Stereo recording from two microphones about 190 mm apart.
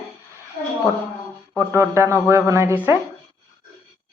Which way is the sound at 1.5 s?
15° right (ahead or behind).